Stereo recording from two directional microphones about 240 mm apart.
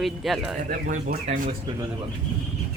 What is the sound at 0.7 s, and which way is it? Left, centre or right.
Speech, right.